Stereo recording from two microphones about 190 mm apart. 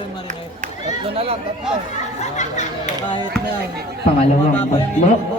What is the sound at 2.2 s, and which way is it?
Chatter, 40° left (ahead or behind).